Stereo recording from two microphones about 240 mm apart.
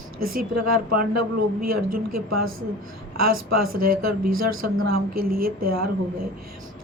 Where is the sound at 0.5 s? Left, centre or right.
Right.